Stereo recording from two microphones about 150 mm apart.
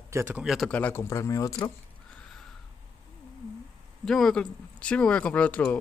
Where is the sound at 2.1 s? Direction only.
5° left (ahead or behind).